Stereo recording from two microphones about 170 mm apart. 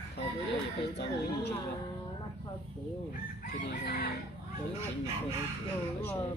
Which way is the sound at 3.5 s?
65° left (ahead or behind).